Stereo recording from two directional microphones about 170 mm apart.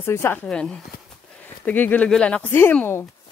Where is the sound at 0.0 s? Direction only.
15° left (ahead or behind).